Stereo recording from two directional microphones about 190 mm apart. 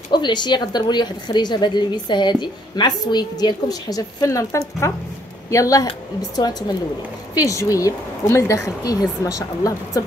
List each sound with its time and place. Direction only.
0.1 s a woman's voice: 25° left (ahead or behind)